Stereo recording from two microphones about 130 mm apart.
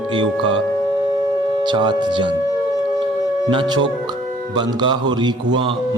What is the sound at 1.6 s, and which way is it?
Speech, 35° right (ahead or behind).